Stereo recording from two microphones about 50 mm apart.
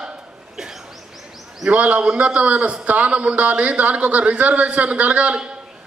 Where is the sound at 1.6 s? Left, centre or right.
Right.